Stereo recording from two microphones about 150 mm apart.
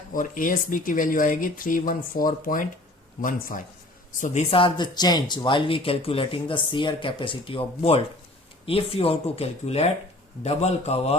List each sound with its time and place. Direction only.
0.1 s a man's voice: 65° left (ahead or behind)
4.5 s a man's voice: 35° left (ahead or behind)